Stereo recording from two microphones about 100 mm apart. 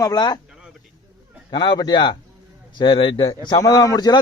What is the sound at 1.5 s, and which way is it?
Speech, 50° left (ahead or behind).